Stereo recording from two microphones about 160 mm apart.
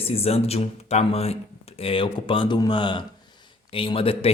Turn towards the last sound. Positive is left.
turn(degrees=35)  # may be behind; listen again after turning